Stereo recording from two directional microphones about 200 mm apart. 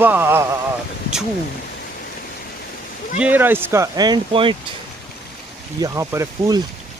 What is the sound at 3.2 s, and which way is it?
Speech, 10° right (ahead or behind).